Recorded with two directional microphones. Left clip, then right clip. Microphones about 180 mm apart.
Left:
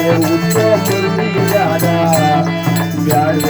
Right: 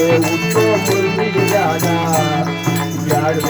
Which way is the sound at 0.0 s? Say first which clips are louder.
Left 1 dB; 40° left (ahead or behind).